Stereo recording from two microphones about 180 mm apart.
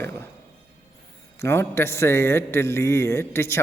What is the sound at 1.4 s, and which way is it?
A man's voice, 15° left (ahead or behind).